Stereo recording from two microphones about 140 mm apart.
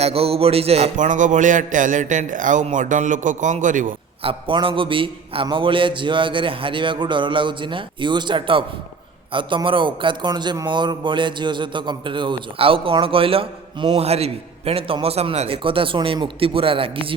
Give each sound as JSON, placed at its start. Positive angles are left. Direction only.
{"t": 0.0, "sound": "music", "side_deg": -45}
{"t": 0.9, "sound": "a man's voice", "side_deg": -65}
{"t": 4.2, "sound": "a man's voice", "side_deg": -40}